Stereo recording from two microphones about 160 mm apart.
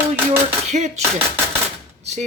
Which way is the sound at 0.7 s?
45° right (ahead or behind).